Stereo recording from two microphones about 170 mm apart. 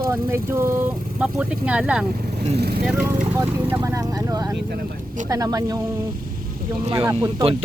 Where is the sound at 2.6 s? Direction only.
70° right (ahead or behind).